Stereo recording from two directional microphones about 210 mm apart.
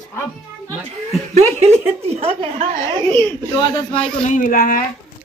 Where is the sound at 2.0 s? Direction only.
30° right (ahead or behind).